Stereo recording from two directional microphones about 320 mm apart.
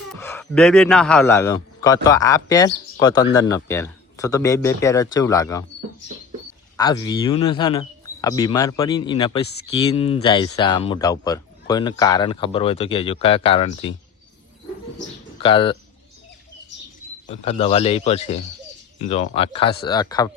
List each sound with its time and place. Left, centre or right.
0.2 s a man's voice: centre
6.7 s speech: centre
15.4 s speech: centre
17.2 s speech: centre